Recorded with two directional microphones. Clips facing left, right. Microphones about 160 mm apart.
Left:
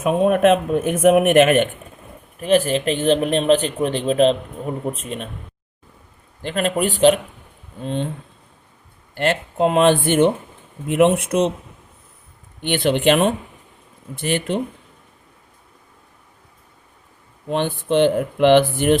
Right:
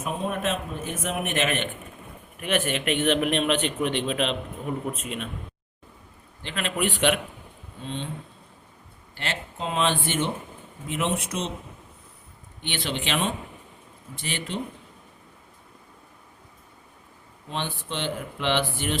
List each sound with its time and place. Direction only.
0.0 s speech: 65° left (ahead or behind); by 1.7 s 50° left (ahead or behind)
2.4 s a man's voice: 35° left (ahead or behind)
6.4 s a man's voice: 45° left (ahead or behind)
7.9 s speech: 50° left (ahead or behind)
9.1 s speech: 50° left (ahead or behind)
12.6 s speech: 55° left (ahead or behind)
17.5 s speech: 55° left (ahead or behind)